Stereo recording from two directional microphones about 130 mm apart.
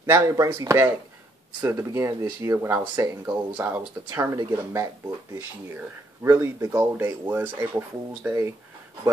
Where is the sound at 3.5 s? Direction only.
15° right (ahead or behind).